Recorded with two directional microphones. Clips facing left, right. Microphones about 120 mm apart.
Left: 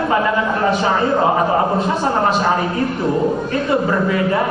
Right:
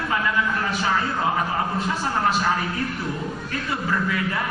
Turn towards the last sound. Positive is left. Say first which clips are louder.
# left 8 dB
turn(degrees=30)  # may be behind; listen again after turning